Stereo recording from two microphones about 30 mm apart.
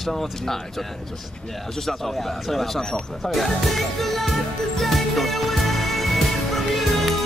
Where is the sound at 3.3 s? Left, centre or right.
Centre.